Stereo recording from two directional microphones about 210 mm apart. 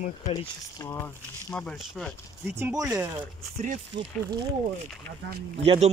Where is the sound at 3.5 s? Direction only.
35° right (ahead or behind).